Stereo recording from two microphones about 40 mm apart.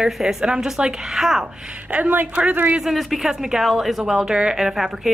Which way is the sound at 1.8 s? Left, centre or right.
Right.